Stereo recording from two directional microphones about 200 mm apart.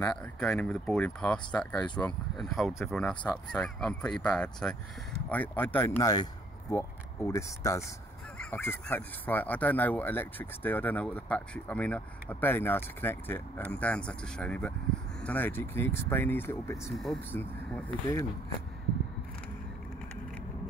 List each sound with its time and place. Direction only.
0.0 s speech: 5° left (ahead or behind)
16.9 s speech: centre (ahead or behind)